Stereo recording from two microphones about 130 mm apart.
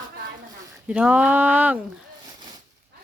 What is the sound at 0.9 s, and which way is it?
Speech, 10° right (ahead or behind).